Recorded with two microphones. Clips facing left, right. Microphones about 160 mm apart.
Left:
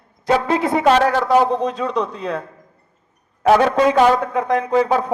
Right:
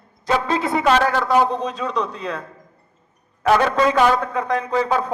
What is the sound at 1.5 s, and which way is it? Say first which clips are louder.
Speech: left 4 dB; 60° left (ahead or behind).